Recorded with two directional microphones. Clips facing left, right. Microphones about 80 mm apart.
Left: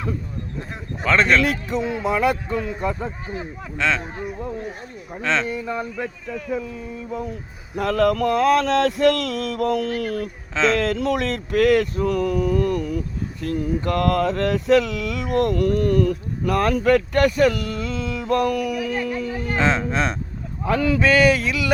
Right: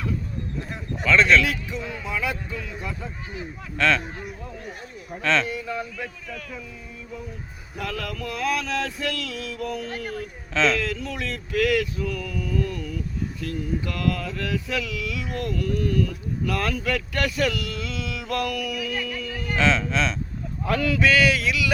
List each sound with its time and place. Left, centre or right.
1.0 s speech: left
1.7 s a sound: left
2.6 s speech: left
3.8 s speech: centre
7.1 s a sound: left
10.5 s speech: left
10.9 s a sound: left
11.5 s speech: left
12.1 s a sound: left
12.8 s speech: left
16.8 s speech: left
20.7 s speech: left